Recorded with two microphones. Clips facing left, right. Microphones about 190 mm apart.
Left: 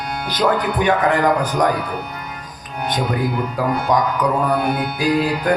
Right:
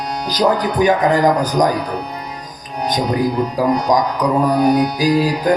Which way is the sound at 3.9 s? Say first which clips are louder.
Right 2 dB; 40° right (ahead or behind).